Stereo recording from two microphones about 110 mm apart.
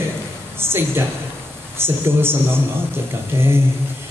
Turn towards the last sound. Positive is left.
turn(degrees=-20)  # may be behind; listen again after turning